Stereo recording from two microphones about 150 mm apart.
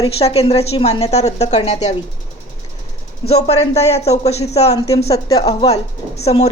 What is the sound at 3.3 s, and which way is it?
Speech, 45° left (ahead or behind).